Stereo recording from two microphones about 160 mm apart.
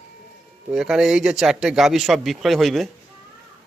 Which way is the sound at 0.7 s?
5° right (ahead or behind).